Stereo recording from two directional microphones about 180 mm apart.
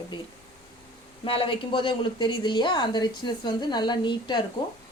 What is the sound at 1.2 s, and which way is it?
A woman's voice, 30° left (ahead or behind).